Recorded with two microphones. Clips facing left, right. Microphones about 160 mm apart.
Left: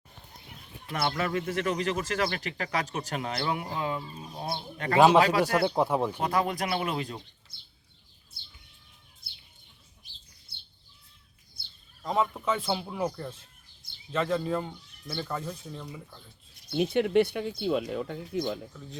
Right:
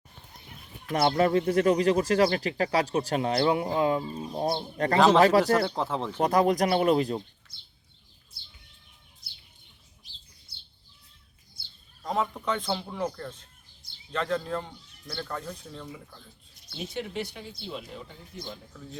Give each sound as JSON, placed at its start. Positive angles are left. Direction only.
{"t": 0.9, "sound": "speech", "side_deg": -40}
{"t": 4.9, "sound": "a man's voice", "side_deg": 10}
{"t": 6.1, "sound": "speech", "side_deg": -40}
{"t": 12.0, "sound": "a man's voice", "side_deg": 0}
{"t": 16.6, "sound": "speech", "side_deg": 60}